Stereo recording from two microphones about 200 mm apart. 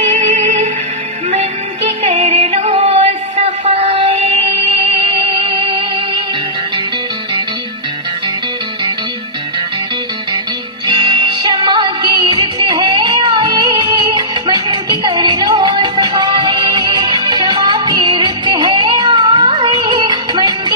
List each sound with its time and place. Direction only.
0.0 s music: 35° right (ahead or behind)
11.0 s music: 25° right (ahead or behind)